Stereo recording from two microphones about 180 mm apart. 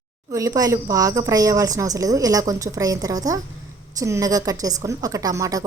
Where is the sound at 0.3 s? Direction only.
20° right (ahead or behind).